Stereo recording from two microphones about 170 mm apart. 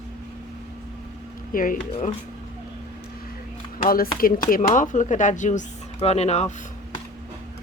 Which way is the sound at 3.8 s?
60° left (ahead or behind).